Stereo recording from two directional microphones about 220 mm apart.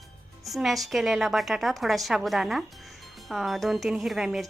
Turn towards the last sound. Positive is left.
turn(degrees=0)  # may be behind; listen again after turning